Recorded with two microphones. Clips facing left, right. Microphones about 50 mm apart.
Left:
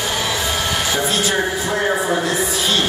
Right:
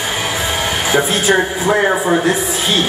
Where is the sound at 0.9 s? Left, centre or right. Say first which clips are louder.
Right 8 dB; right.